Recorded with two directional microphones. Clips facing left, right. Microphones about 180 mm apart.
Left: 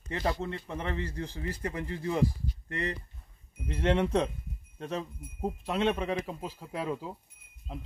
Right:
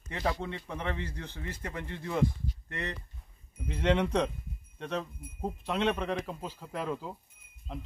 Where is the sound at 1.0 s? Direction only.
30° left (ahead or behind).